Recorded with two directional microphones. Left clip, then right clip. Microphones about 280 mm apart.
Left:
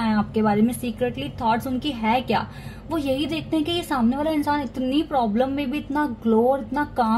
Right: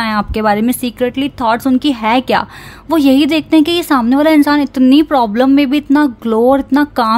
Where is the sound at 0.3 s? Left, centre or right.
Right.